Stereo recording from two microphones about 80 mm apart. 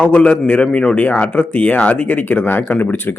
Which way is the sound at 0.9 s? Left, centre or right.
Centre.